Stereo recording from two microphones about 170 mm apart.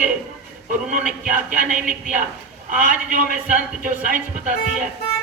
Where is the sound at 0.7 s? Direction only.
50° right (ahead or behind).